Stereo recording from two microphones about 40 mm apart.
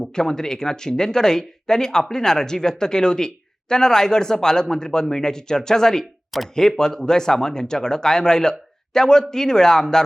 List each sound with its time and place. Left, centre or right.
0.0 s speech: centre